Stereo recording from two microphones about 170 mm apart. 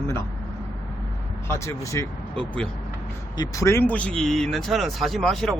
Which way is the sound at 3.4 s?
15° left (ahead or behind).